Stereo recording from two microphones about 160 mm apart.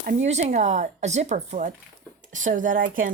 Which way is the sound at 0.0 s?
60° right (ahead or behind).